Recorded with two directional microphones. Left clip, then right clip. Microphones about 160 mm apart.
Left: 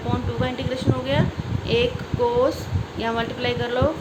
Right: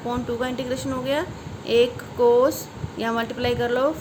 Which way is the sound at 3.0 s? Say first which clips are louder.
Even; 35° right (ahead or behind).